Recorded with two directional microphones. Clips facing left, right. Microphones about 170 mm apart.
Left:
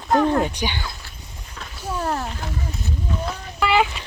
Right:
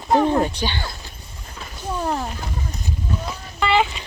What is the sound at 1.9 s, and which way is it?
Speech, 10° right (ahead or behind).